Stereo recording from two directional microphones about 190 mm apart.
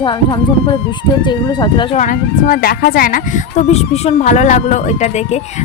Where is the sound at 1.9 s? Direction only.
40° left (ahead or behind).